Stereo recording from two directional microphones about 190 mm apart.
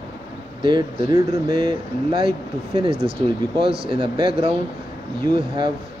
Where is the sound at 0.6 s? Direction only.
25° right (ahead or behind).